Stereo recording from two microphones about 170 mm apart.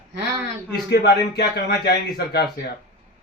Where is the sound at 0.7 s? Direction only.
90° left; by 2.5 s 75° left (ahead or behind).